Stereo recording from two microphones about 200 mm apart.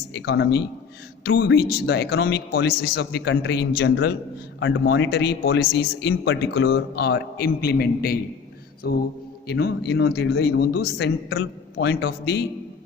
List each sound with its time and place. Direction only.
0.1 s a man's voice: 60° left (ahead or behind)
4.6 s a man's voice: 65° left (ahead or behind)